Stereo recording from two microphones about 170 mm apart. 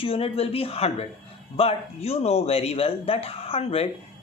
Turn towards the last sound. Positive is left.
turn(degrees=35)  # may be behind; listen again after turning